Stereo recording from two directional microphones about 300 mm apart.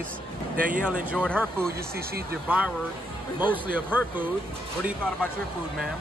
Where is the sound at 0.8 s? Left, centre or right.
Centre.